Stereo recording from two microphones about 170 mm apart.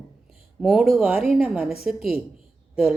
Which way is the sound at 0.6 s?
Centre (ahead or behind).